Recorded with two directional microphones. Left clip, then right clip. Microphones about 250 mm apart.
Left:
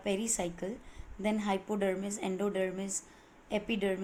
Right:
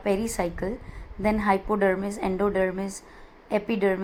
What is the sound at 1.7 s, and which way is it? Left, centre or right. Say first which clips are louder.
A woman's voice: right 9 dB; centre.